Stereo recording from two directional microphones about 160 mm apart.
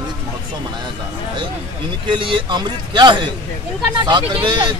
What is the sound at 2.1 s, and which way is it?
A man's voice, 30° right (ahead or behind).